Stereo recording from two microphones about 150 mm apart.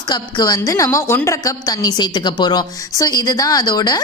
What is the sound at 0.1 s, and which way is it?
A woman's voice, 25° left (ahead or behind).